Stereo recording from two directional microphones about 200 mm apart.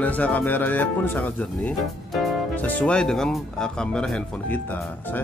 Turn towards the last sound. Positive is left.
turn(degrees=5)  # may be behind; listen again after turning